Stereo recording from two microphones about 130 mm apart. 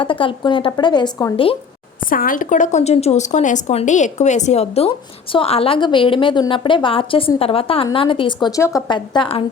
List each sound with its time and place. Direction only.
0.0 s a woman's voice: 40° left (ahead or behind)
2.0 s a woman's voice: 90° left; by 9.4 s 40° left (ahead or behind)